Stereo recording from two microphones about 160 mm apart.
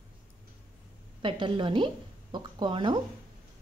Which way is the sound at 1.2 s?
30° right (ahead or behind).